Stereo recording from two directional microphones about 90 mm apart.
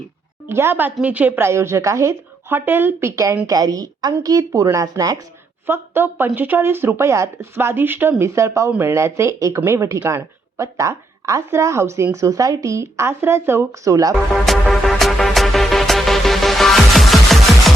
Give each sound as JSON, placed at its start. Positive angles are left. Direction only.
{"t": 0.4, "sound": "a woman's voice", "side_deg": -25}
{"t": 1.5, "sound": "speech", "side_deg": -30}
{"t": 3.4, "sound": "a woman's voice", "side_deg": -45}
{"t": 5.6, "sound": "speech", "side_deg": -25}
{"t": 8.2, "sound": "speech", "side_deg": -35}
{"t": 14.3, "sound": "music", "side_deg": 0}